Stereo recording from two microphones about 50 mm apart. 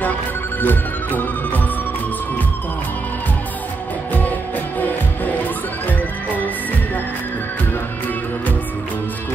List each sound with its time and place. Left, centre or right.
0.6 s music: left
4.7 s music: left